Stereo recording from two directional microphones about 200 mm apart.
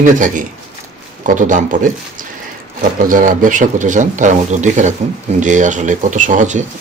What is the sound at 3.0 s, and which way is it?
Speech, 40° right (ahead or behind).